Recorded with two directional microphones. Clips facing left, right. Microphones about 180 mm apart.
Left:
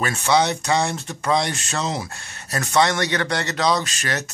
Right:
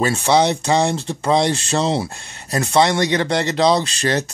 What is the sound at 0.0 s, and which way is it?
Speech, 30° right (ahead or behind).